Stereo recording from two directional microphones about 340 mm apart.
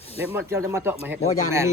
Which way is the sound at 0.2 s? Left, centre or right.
Centre.